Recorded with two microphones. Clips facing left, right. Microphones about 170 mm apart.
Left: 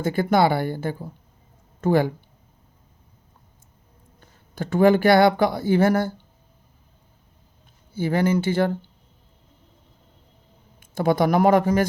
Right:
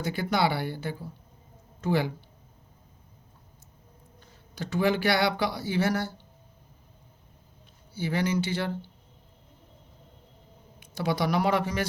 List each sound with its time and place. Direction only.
0.0 s speech: 50° left (ahead or behind)
4.5 s speech: 50° left (ahead or behind)
7.9 s speech: 50° left (ahead or behind)
10.8 s speech: 50° left (ahead or behind)